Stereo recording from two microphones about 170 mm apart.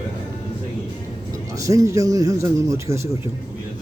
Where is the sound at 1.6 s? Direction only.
20° right (ahead or behind).